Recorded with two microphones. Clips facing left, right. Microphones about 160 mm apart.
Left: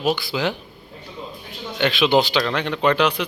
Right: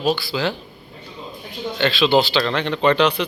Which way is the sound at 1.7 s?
15° left (ahead or behind).